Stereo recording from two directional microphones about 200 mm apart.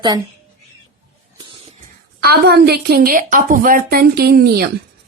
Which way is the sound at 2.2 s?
55° right (ahead or behind).